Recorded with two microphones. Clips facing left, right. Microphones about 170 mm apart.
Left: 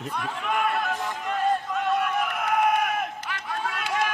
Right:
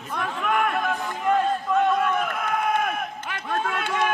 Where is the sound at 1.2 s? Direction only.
50° right (ahead or behind).